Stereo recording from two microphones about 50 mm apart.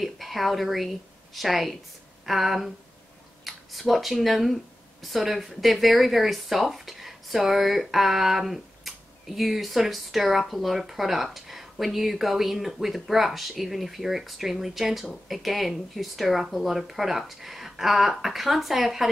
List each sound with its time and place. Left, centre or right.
0.0 s speech: centre